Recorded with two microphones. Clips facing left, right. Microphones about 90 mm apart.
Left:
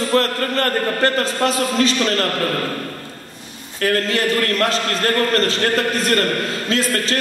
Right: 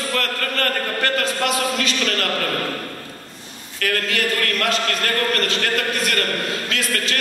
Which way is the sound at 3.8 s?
35° left (ahead or behind).